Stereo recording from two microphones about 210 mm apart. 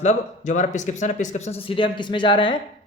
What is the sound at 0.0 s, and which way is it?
Speech, 35° left (ahead or behind).